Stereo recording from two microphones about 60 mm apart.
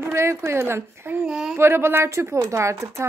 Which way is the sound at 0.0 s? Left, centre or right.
Right.